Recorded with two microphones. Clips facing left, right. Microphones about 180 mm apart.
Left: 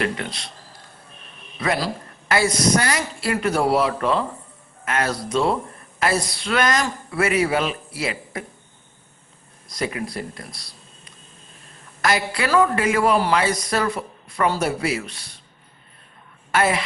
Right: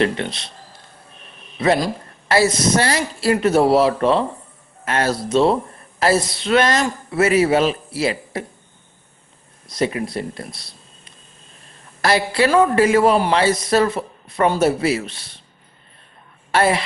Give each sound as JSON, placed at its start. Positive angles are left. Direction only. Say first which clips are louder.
{"t": 0.0, "sound": "a man's voice", "louder": "right 5 dB", "side_deg": -25}
{"t": 1.5, "sound": "a woman's voice", "louder": "right 6 dB", "side_deg": -25}
{"t": 9.6, "sound": "a man's voice", "louder": "right 5 dB", "side_deg": -25}
{"t": 16.5, "sound": "a woman's voice", "louder": "right 3 dB", "side_deg": -30}